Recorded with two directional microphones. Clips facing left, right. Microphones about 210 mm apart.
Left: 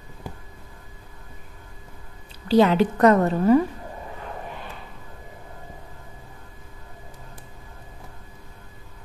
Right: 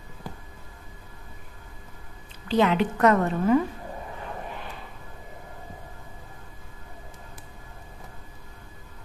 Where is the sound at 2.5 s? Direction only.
35° left (ahead or behind).